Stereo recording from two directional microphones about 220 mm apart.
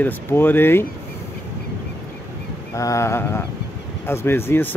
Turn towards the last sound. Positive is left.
turn(degrees=10)  # may be behind; listen again after turning